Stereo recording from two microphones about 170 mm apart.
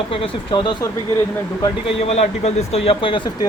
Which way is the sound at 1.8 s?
40° left (ahead or behind).